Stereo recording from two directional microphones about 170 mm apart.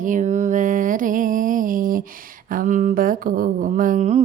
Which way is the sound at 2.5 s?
50° right (ahead or behind).